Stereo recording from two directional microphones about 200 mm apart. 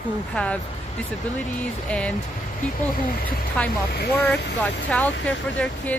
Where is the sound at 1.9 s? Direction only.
5° left (ahead or behind).